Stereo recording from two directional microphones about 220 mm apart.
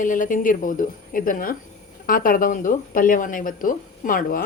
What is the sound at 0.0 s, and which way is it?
A woman's voice, 35° left (ahead or behind).